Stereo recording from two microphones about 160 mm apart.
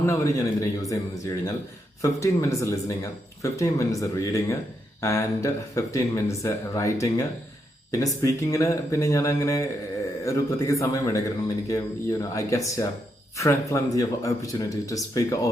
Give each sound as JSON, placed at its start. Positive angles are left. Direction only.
{"t": 0.0, "sound": "speech", "side_deg": 20}
{"t": 2.0, "sound": "speech", "side_deg": 20}